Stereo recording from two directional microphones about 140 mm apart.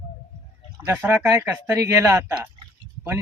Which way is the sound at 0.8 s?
15° right (ahead or behind).